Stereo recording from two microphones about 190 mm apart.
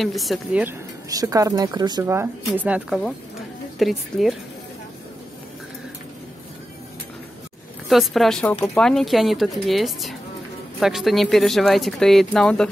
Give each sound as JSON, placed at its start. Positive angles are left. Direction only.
{"t": 0.0, "sound": "speech", "side_deg": 0}
{"t": 1.1, "sound": "speech", "side_deg": -20}
{"t": 7.9, "sound": "speech", "side_deg": 0}